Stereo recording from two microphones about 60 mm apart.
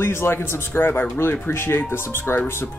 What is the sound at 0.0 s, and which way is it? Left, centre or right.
Speech, left.